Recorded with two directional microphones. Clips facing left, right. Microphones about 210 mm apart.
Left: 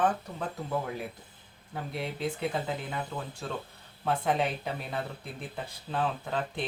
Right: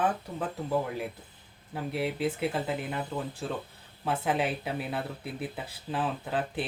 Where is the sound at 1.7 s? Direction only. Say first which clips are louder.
Right 4 dB; 5° right (ahead or behind).